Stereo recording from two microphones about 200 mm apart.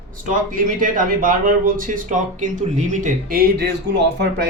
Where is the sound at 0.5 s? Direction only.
45° right (ahead or behind).